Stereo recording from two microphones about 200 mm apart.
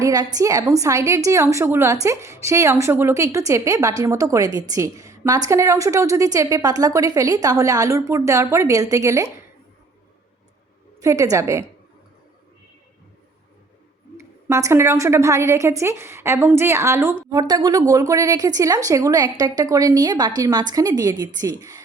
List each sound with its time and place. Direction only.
0.0 s a woman's voice: 20° right (ahead or behind)
11.0 s a woman's voice: 15° right (ahead or behind)
14.2 s a woman's voice: 15° right (ahead or behind)